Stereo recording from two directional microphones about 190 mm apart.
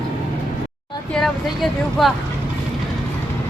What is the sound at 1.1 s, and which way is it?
A woman's voice, centre (ahead or behind).